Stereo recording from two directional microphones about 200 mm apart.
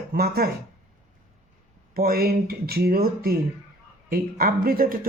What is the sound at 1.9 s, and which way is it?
Speech, 50° right (ahead or behind).